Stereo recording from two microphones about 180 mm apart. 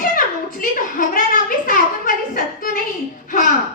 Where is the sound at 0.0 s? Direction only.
50° left (ahead or behind).